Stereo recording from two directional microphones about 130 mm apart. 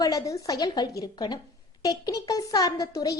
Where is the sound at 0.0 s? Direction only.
25° left (ahead or behind).